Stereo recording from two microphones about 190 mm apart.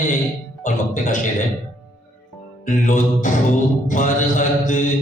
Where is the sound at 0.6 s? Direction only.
45° left (ahead or behind).